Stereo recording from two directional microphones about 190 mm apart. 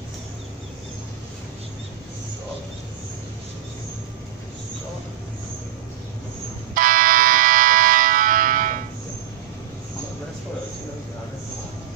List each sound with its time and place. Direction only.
6.7 s fire alarm: 45° right (ahead or behind)